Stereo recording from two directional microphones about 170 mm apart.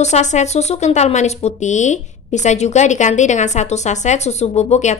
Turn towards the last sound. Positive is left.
turn(degrees=40)  # may be behind; listen again after turning